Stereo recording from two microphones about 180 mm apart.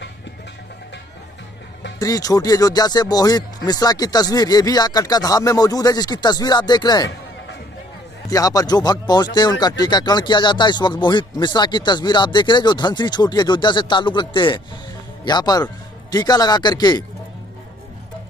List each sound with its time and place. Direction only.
2.0 s speech: 20° left (ahead or behind)
8.3 s speech: 20° left (ahead or behind)